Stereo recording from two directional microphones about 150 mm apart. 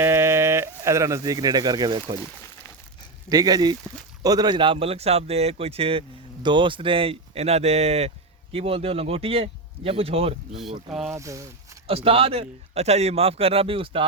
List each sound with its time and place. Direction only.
0.0 s speech: 15° right (ahead or behind)
3.2 s speech: 25° right (ahead or behind); by 10.3 s 40° right (ahead or behind)
10.5 s speech: centre (ahead or behind)
11.1 s speech: 20° right (ahead or behind)
11.9 s speech: 40° right (ahead or behind)